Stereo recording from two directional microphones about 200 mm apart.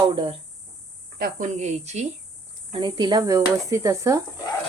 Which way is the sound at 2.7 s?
25° right (ahead or behind).